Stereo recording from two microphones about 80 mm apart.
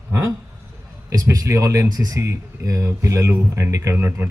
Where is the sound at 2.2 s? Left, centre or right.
Right.